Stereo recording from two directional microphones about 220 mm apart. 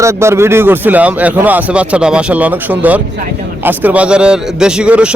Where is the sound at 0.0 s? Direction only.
10° right (ahead or behind).